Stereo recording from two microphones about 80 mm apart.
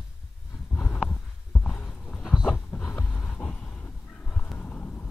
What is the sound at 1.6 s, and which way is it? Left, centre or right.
Clip-clop, centre.